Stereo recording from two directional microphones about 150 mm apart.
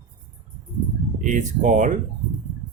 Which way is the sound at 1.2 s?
55° right (ahead or behind).